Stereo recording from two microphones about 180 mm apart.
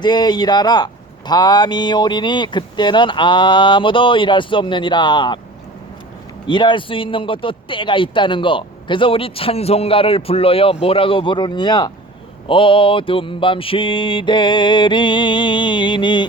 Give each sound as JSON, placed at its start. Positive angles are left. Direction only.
{"t": 0.0, "sound": "speech", "side_deg": 25}
{"t": 6.5, "sound": "speech", "side_deg": 25}